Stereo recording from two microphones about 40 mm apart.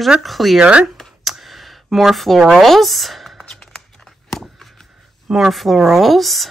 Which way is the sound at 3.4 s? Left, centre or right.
Centre.